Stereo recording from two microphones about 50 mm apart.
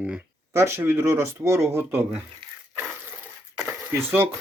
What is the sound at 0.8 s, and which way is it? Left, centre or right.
Speech, right.